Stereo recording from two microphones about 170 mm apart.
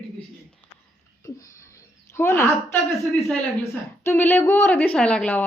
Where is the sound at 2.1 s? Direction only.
15° left (ahead or behind).